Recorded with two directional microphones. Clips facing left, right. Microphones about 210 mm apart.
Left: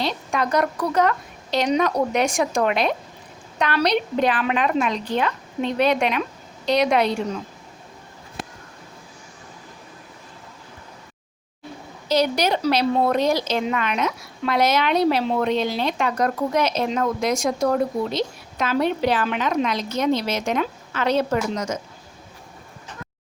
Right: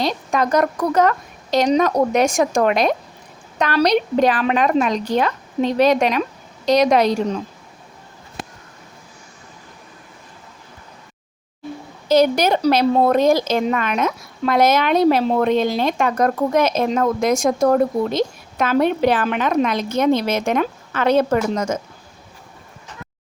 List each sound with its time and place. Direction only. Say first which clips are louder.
0.0 s a woman's voice: right 4 dB; 45° right (ahead or behind)
12.0 s a woman's voice: right 5 dB; 50° right (ahead or behind)